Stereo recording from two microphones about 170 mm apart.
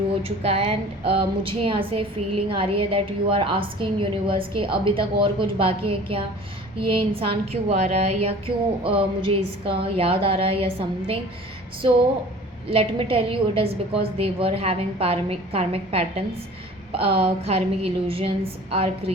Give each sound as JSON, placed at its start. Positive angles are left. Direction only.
{"t": 0.2, "sound": "a woman's voice", "side_deg": -35}
{"t": 12.7, "sound": "a woman's voice", "side_deg": -35}